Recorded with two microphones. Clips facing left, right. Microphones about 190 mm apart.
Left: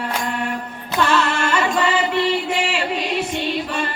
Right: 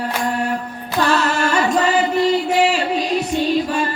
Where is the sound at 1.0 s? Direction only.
40° right (ahead or behind).